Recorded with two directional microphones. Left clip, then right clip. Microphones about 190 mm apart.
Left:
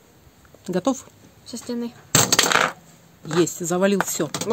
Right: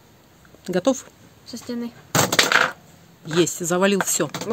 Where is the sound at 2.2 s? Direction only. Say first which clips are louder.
Right 1 dB; 35° left (ahead or behind).